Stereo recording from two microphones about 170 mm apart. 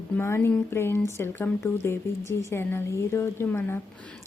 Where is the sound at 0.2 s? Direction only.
15° left (ahead or behind).